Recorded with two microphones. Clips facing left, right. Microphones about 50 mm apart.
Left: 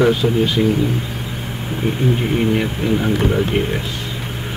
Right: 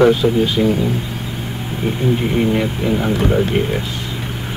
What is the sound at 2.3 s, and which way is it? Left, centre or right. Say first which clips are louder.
Speech: right 1 dB; centre.